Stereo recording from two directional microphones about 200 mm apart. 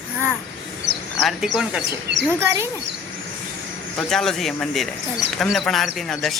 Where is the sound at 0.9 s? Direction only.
65° right (ahead or behind).